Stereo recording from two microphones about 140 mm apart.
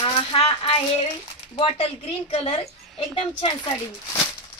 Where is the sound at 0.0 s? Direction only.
40° left (ahead or behind).